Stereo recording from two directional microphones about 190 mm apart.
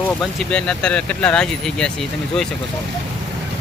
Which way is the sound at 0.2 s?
5° left (ahead or behind).